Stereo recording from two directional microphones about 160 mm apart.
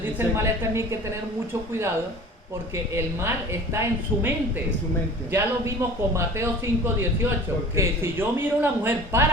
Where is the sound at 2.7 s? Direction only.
15° right (ahead or behind).